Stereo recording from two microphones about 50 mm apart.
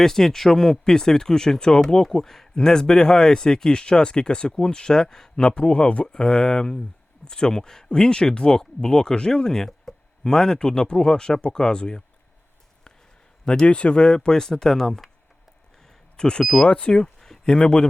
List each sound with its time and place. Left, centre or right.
0.0 s speech: centre
13.4 s speech: centre
16.1 s speech: centre
16.6 s speech: left
17.2 s a sound: centre